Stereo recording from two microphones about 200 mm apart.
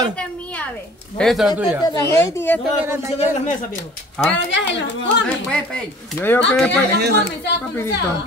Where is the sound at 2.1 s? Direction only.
10° left (ahead or behind).